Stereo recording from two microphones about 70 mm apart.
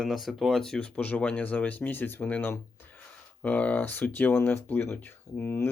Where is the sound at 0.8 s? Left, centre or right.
Centre.